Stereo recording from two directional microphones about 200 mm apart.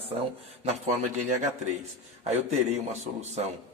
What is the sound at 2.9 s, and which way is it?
Speech, 35° right (ahead or behind).